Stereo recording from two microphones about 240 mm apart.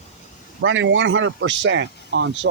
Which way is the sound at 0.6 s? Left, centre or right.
Right.